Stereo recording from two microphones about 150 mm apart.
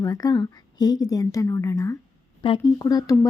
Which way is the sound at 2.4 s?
30° left (ahead or behind).